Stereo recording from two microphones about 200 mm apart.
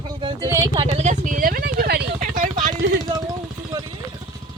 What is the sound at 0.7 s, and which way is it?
Speech, 30° right (ahead or behind).